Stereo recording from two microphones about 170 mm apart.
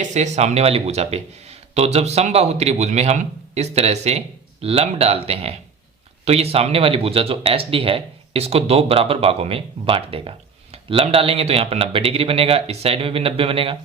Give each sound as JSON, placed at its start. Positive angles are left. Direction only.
{"t": 0.1, "sound": "speech", "side_deg": -40}